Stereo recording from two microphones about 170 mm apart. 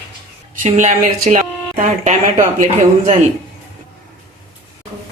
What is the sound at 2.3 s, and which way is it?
Speech, 45° right (ahead or behind).